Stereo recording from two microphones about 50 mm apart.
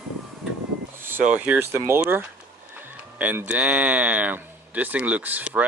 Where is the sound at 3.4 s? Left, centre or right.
Right.